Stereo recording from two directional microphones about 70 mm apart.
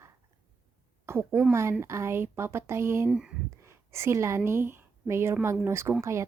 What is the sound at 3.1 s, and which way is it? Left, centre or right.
Speech, centre.